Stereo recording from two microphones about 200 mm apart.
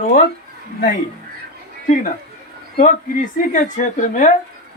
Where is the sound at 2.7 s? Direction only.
45° left (ahead or behind).